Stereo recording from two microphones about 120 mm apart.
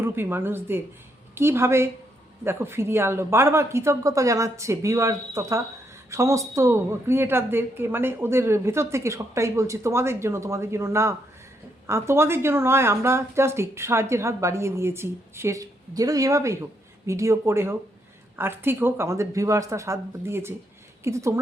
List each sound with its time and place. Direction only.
0.0 s a woman's voice: 20° right (ahead or behind)